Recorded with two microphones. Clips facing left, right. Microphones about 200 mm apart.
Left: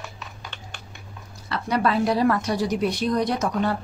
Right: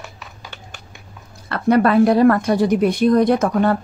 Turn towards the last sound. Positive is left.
turn(degrees=-55)  # may be behind; listen again after turning